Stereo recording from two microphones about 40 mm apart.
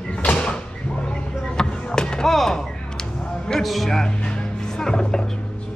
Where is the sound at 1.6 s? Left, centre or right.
Centre.